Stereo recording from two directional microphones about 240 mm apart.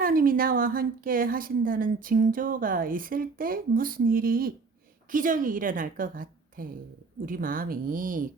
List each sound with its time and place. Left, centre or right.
0.0 s a woman's voice: right